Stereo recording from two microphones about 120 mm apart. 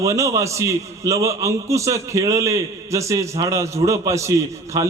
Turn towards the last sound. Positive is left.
turn(degrees=-25)  # may be behind; listen again after turning